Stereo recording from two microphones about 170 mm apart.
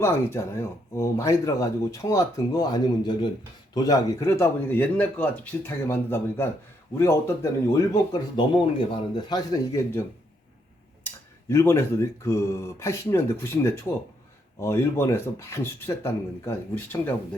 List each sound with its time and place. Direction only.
0.0 s speech: 15° left (ahead or behind)
11.0 s speech: 15° left (ahead or behind)